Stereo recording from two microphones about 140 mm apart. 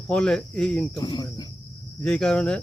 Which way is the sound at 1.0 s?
30° left (ahead or behind).